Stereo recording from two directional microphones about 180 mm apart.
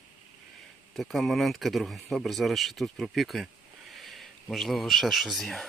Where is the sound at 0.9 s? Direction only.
Centre (ahead or behind).